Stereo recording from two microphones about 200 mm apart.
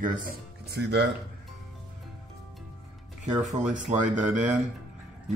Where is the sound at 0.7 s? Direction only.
60° right (ahead or behind).